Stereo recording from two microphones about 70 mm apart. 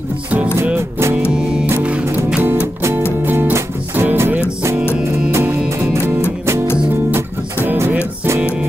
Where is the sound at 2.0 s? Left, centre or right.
Right.